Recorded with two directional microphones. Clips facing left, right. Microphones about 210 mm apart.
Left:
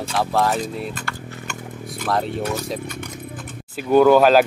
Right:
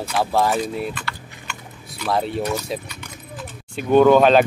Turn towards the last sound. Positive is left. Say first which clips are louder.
# even
turn(degrees=5)  # may be behind; listen again after turning